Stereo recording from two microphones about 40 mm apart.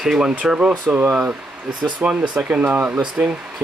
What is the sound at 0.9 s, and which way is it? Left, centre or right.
Speech, right.